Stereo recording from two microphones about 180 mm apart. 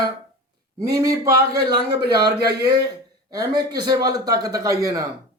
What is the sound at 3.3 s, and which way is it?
Speech, 20° right (ahead or behind).